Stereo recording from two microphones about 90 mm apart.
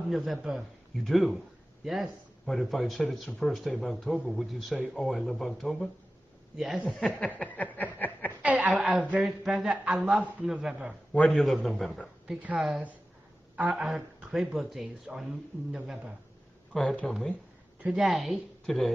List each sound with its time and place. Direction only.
0.1 s speech: 5° right (ahead or behind)
7.1 s a sound: 15° left (ahead or behind)
8.4 s a woman's voice: 15° right (ahead or behind)
11.1 s speech: 5° left (ahead or behind)
12.4 s speech: 15° right (ahead or behind)
16.7 s a sound: 5° left (ahead or behind)
17.9 s speech: centre (ahead or behind)